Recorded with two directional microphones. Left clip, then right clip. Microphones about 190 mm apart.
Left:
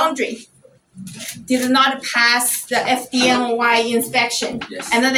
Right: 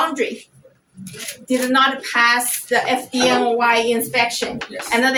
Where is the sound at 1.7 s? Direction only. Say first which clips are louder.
Left 1 dB; 15° right (ahead or behind).